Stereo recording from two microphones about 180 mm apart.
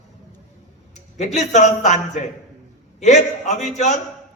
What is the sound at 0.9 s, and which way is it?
Speech, 40° left (ahead or behind).